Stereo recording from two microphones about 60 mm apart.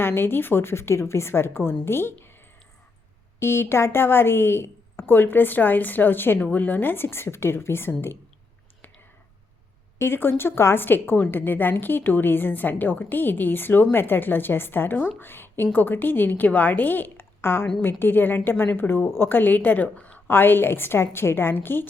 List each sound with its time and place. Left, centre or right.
0.0 s a woman's voice: left
3.4 s speech: left
10.0 s a woman's voice: left